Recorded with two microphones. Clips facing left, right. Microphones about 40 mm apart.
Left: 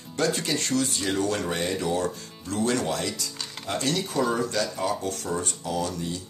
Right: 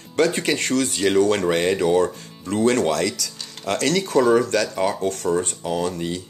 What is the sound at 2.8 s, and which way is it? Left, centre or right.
Speech, right.